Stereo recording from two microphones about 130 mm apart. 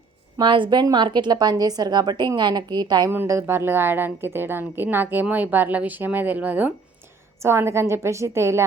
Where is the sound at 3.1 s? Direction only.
20° right (ahead or behind).